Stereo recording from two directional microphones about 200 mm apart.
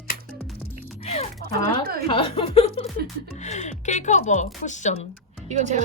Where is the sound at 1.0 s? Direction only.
30° left (ahead or behind).